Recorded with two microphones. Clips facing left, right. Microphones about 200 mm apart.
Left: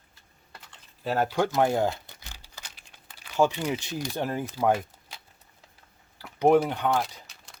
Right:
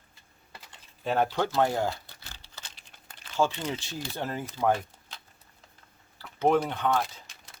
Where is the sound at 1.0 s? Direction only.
5° left (ahead or behind).